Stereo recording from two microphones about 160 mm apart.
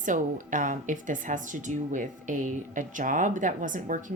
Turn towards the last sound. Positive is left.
turn(degrees=-55)  # may be behind; listen again after turning